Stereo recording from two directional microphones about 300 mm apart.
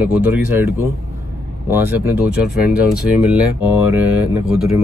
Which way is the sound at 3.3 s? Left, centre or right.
Centre.